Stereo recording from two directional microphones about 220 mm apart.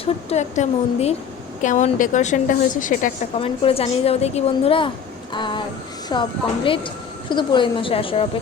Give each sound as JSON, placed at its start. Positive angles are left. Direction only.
{"t": 0.0, "sound": "a woman's voice", "side_deg": 30}
{"t": 3.4, "sound": "speech", "side_deg": 25}
{"t": 5.3, "sound": "a sound", "side_deg": 20}
{"t": 6.1, "sound": "speech", "side_deg": 20}